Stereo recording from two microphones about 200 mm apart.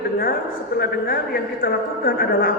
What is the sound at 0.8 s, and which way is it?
A man's voice, 50° left (ahead or behind).